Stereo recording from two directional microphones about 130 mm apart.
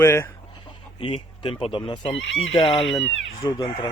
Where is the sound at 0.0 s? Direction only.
20° left (ahead or behind).